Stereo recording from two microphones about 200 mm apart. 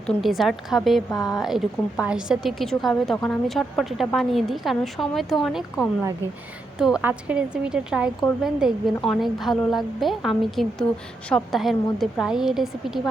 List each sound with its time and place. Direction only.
0.1 s a woman's voice: centre (ahead or behind)
1.1 s speech: 20° left (ahead or behind)
1.4 s a woman's voice: centre (ahead or behind)